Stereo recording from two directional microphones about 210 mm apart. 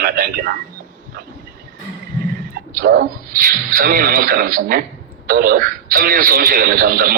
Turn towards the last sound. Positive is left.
turn(degrees=-40)  # may be behind; listen again after turning